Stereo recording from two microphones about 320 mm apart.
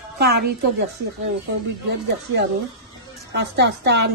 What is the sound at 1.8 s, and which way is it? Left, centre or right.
A woman's voice, right.